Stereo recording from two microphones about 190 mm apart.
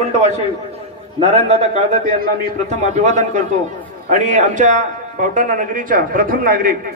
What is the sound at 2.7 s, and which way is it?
A man's voice, 40° right (ahead or behind).